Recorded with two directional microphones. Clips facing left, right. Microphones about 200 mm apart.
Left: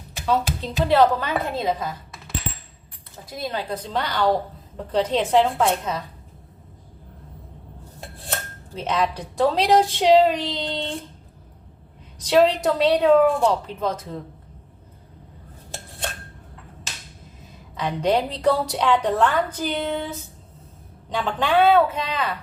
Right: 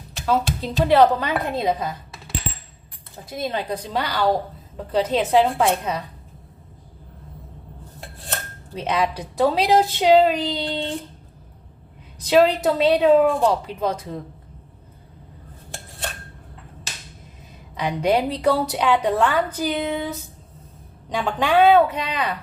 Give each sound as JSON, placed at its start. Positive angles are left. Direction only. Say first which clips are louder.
{"t": 0.3, "sound": "speech", "louder": "right 1 dB", "side_deg": -5}
{"t": 0.9, "sound": "a woman's voice", "louder": "right 2 dB", "side_deg": -15}
{"t": 3.3, "sound": "speech", "louder": "right 2 dB", "side_deg": -20}
{"t": 3.9, "sound": "a woman's voice", "louder": "even", "side_deg": -10}
{"t": 8.7, "sound": "a woman's voice", "louder": "right 1 dB", "side_deg": -10}
{"t": 12.3, "sound": "a woman's voice", "louder": "right 1 dB", "side_deg": -5}
{"t": 17.7, "sound": "a woman's voice", "louder": "right 1 dB", "side_deg": -10}
{"t": 21.1, "sound": "a woman's voice", "louder": "right 1 dB", "side_deg": -10}